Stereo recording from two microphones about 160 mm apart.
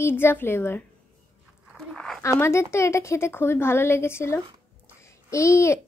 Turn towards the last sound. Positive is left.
turn(degrees=20)  # may be behind; listen again after turning